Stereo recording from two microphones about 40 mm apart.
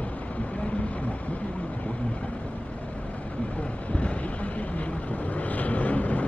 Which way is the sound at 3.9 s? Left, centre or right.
Left.